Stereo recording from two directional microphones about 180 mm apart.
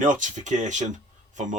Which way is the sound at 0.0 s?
45° right (ahead or behind).